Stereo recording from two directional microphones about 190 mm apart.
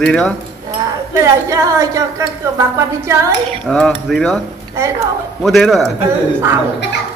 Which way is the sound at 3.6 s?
5° left (ahead or behind).